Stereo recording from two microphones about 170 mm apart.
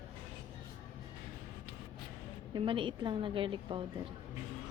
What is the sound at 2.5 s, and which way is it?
A woman's voice, 30° right (ahead or behind).